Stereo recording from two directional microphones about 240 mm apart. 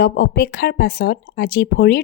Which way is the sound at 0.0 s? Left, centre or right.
Left.